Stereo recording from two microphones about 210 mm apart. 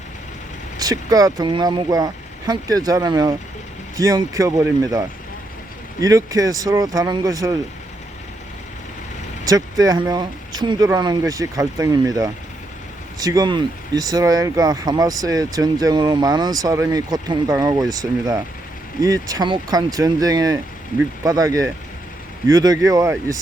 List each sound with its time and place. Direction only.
0.8 s speech: 15° right (ahead or behind)
9.4 s speech: 15° right (ahead or behind)
19.0 s speech: 15° right (ahead or behind)